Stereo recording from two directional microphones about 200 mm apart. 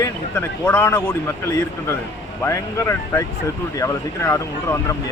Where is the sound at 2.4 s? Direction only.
15° left (ahead or behind).